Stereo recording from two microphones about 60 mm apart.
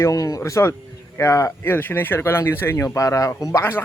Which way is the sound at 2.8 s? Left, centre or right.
Left.